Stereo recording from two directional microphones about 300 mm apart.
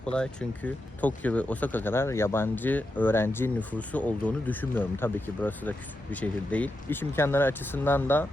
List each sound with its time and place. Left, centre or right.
0.0 s speech: centre